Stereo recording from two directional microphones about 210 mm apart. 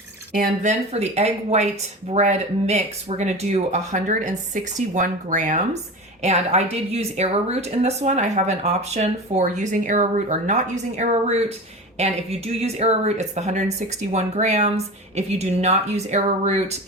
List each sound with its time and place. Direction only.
0.3 s speech: 40° right (ahead or behind)